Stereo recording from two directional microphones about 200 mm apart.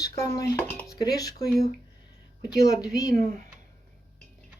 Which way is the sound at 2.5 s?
20° left (ahead or behind).